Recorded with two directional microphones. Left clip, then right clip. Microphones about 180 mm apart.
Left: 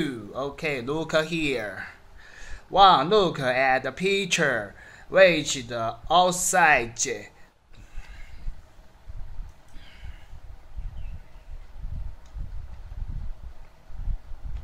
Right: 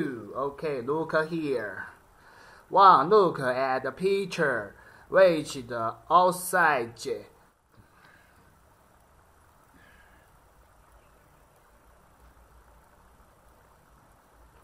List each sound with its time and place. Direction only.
0.0 s a sound: 15° left (ahead or behind)
0.8 s speech: 5° right (ahead or behind)
1.6 s speech: 15° left (ahead or behind)
2.3 s a man's voice: 10° right (ahead or behind)
4.4 s speech: 15° left (ahead or behind)
5.1 s speech: 15° right (ahead or behind)